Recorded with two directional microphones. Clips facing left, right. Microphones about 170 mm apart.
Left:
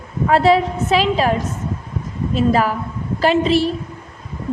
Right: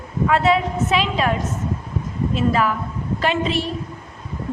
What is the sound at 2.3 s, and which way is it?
A woman's voice, 35° left (ahead or behind).